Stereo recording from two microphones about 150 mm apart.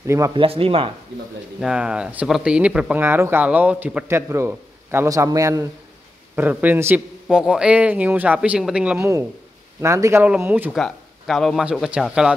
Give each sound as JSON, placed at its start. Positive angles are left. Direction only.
{"t": 0.0, "sound": "speech", "side_deg": -20}
{"t": 0.3, "sound": "speech", "side_deg": -35}
{"t": 1.6, "sound": "speech", "side_deg": -5}
{"t": 9.8, "sound": "speech", "side_deg": -20}
{"t": 10.7, "sound": "speech", "side_deg": 0}